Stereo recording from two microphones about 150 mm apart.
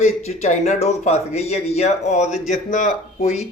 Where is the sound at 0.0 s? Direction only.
45° left (ahead or behind).